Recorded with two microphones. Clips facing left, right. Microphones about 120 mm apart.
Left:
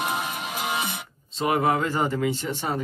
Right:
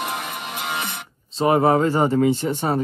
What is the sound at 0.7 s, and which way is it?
Music, 60° right (ahead or behind).